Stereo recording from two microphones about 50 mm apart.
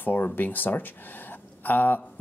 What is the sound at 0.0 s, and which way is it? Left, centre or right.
Speech, left.